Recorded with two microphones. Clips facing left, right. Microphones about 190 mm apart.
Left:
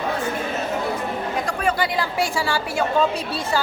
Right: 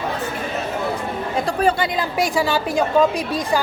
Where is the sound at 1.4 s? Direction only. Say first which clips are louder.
Right 6 dB; 30° right (ahead or behind).